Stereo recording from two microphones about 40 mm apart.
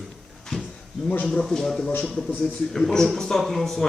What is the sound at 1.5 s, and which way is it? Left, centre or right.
Speech, centre.